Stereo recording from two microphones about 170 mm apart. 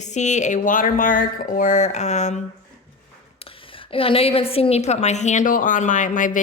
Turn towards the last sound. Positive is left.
turn(degrees=50)  # may be behind; listen again after turning